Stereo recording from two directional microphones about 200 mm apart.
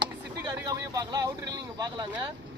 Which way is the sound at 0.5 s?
15° right (ahead or behind).